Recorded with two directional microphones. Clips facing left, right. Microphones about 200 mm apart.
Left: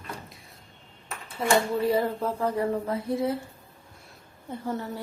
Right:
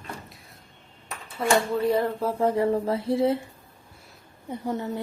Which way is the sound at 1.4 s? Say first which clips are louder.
Right 1 dB; 5° left (ahead or behind).